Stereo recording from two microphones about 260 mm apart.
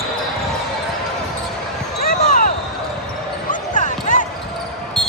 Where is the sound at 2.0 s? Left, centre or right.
Left.